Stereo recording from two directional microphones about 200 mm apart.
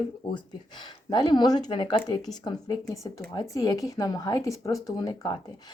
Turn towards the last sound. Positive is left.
turn(degrees=20)  # may be behind; listen again after turning